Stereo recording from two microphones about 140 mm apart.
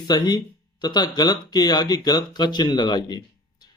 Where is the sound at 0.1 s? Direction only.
30° left (ahead or behind).